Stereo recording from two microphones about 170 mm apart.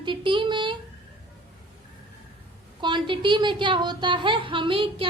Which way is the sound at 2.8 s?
25° right (ahead or behind).